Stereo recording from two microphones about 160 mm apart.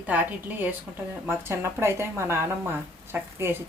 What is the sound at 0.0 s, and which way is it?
Speech, 10° right (ahead or behind).